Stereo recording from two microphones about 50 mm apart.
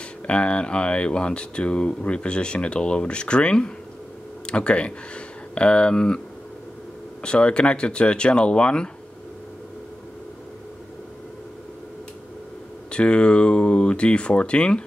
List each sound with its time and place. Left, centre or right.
0.3 s speech: left
7.2 s speech: left
12.9 s speech: centre